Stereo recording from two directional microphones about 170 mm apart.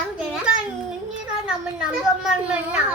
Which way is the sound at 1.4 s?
5° right (ahead or behind).